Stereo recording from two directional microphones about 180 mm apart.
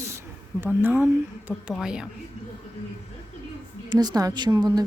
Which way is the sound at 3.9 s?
20° right (ahead or behind).